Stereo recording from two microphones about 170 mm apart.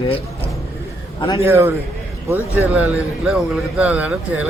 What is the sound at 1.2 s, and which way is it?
Speech, 30° left (ahead or behind).